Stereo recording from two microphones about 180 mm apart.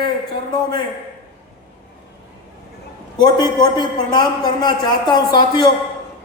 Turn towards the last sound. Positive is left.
turn(degrees=20)  # may be behind; listen again after turning